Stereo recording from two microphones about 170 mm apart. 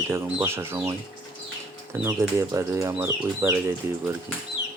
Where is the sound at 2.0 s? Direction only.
20° right (ahead or behind).